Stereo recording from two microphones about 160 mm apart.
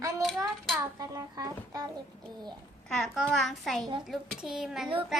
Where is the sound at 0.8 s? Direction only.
20° right (ahead or behind).